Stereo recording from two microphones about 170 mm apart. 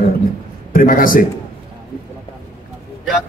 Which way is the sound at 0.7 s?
55° left (ahead or behind).